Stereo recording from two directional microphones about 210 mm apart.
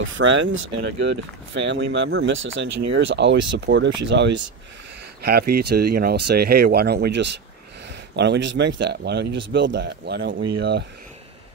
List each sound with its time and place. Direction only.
0.0 s speech: 65° right (ahead or behind)